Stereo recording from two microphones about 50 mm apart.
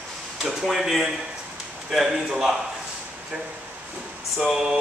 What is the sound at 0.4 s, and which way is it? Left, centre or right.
Speech, centre.